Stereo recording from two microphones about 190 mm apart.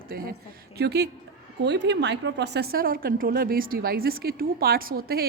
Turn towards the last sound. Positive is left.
turn(degrees=-55)  # may be behind; listen again after turning